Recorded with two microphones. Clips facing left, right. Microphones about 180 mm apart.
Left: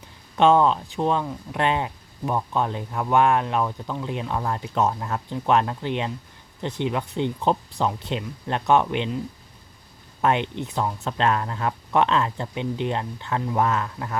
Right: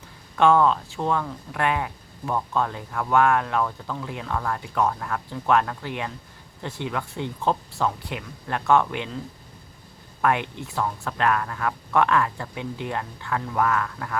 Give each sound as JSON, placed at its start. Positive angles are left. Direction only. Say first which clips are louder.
{"t": 0.3, "sound": "speech", "louder": "left 1 dB", "side_deg": 20}
{"t": 10.2, "sound": "speech", "louder": "left 1 dB", "side_deg": 20}